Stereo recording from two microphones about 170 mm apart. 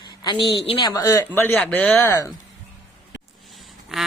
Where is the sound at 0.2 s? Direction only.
25° left (ahead or behind); by 2.0 s 5° left (ahead or behind).